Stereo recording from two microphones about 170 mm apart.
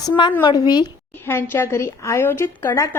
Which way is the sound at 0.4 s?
25° left (ahead or behind).